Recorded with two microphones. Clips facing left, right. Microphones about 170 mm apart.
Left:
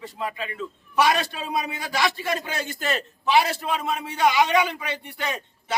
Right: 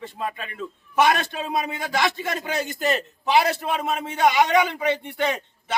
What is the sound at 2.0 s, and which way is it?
A man's voice, 20° right (ahead or behind).